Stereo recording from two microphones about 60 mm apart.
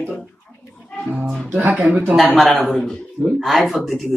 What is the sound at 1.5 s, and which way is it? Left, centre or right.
Speech, right.